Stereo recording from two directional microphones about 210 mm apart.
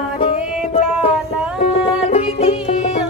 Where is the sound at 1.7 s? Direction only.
30° left (ahead or behind).